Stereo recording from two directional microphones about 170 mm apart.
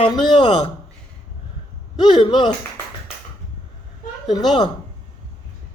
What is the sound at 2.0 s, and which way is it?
Speech, 30° left (ahead or behind).